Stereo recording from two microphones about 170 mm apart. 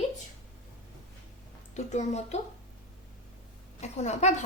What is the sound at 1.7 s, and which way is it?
Speech, 40° left (ahead or behind).